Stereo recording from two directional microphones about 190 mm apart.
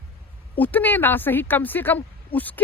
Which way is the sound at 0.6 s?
10° left (ahead or behind).